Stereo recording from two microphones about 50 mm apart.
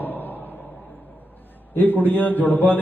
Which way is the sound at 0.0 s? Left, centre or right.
Left.